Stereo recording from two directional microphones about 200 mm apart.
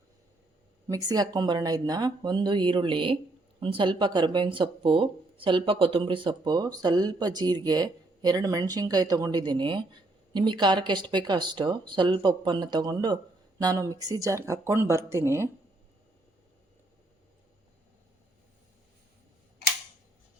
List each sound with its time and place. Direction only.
0.9 s speech: 20° right (ahead or behind)